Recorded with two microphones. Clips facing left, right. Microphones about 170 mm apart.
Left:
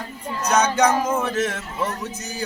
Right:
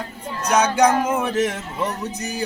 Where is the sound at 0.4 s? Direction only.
10° right (ahead or behind).